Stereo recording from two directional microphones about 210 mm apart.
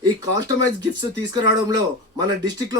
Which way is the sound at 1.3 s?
20° right (ahead or behind).